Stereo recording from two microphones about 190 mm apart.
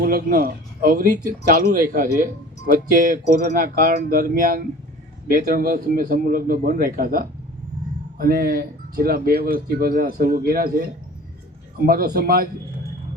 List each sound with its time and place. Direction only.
0.0 s speech: 50° right (ahead or behind)
11.9 s speech: 50° right (ahead or behind)